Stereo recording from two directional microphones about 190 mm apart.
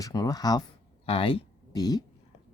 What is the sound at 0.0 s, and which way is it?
Speech, 20° left (ahead or behind).